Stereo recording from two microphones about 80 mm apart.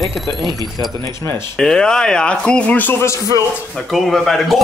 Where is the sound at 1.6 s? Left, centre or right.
Centre.